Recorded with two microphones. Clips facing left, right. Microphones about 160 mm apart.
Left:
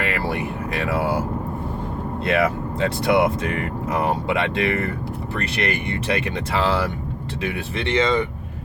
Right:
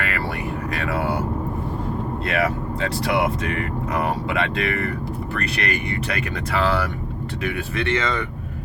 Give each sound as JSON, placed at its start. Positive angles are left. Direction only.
{"t": 0.0, "sound": "a sound", "side_deg": 25}
{"t": 0.8, "sound": "speech", "side_deg": 30}
{"t": 2.2, "sound": "speech", "side_deg": 30}